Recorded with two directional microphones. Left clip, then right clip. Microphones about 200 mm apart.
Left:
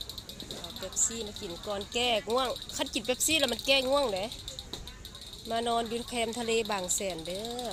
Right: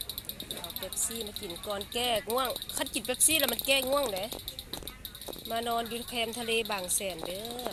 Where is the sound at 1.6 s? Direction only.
5° left (ahead or behind).